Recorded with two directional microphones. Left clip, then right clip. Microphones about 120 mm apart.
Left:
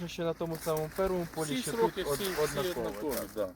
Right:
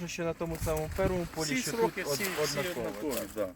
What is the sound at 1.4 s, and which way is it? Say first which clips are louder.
Speech: right 1 dB; 10° left (ahead or behind).